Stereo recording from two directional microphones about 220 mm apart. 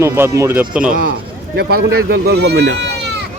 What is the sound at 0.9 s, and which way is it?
Speech, 40° right (ahead or behind).